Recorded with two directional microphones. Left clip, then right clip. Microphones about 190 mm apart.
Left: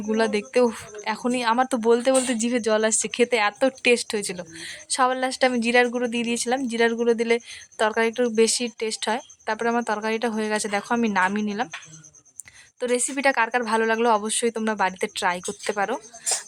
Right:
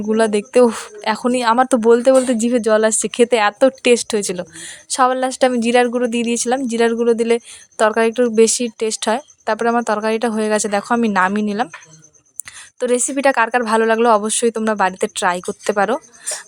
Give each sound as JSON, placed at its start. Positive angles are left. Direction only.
{"t": 0.1, "sound": "speech", "side_deg": -25}
{"t": 12.8, "sound": "speech", "side_deg": -25}